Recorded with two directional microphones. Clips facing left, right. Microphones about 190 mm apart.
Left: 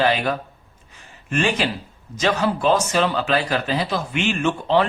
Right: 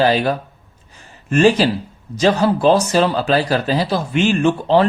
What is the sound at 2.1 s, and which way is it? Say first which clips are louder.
A man's voice: right 6 dB; 35° right (ahead or behind).